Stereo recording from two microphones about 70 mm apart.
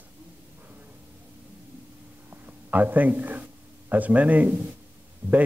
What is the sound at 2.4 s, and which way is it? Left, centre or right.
A man's voice, right.